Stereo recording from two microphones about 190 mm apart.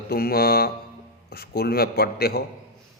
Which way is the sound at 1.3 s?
55° left (ahead or behind).